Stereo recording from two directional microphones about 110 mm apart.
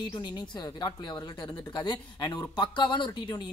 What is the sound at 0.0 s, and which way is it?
Speech, 40° left (ahead or behind).